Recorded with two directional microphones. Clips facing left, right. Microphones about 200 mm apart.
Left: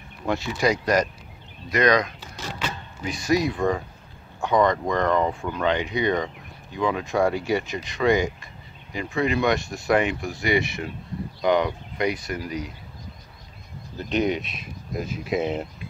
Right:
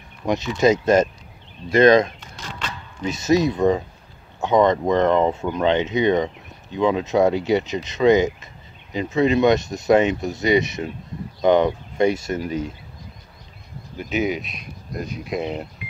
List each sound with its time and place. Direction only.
0.3 s speech: 20° right (ahead or behind)
13.9 s speech: 5° right (ahead or behind)